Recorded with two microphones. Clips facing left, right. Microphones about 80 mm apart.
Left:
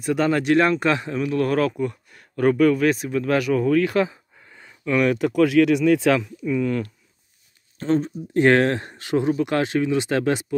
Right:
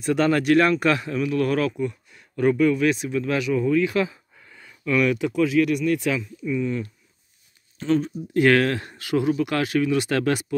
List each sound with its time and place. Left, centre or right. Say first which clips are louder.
0.0 s speech: even; centre; by 4.0 s left
4.0 s a sound: left 2 dB; left
5.3 s speech: left 4 dB; left
7.7 s speech: left 1 dB; left